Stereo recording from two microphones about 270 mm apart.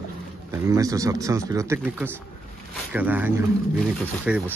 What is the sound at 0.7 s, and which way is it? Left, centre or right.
Speech, centre.